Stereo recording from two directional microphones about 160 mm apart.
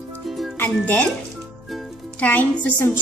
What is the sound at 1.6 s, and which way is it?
Music, centre (ahead or behind).